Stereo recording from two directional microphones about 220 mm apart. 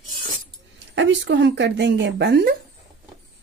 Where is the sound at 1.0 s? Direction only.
55° right (ahead or behind).